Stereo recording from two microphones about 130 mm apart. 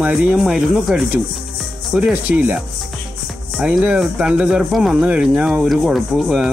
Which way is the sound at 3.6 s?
10° right (ahead or behind).